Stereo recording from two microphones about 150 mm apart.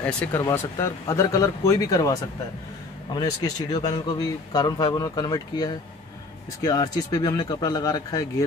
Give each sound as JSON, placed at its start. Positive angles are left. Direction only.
{"t": 0.0, "sound": "a man's voice", "side_deg": 15}
{"t": 3.2, "sound": "a man's voice", "side_deg": 25}